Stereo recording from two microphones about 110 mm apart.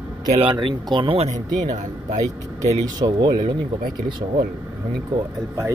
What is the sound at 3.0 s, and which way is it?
Speech, 40° right (ahead or behind).